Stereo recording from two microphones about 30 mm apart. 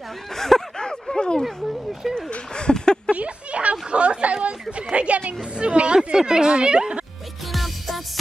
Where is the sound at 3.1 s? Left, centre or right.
Right.